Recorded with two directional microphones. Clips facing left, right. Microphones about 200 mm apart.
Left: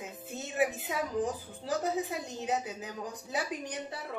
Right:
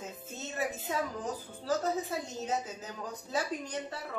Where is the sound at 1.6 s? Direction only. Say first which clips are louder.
Even; 15° left (ahead or behind).